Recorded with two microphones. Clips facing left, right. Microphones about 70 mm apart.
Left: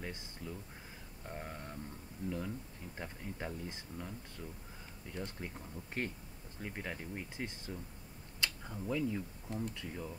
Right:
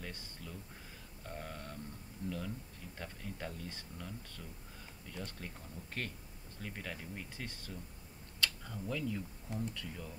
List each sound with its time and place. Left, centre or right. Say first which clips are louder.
0.0 s speech: left 3 dB; centre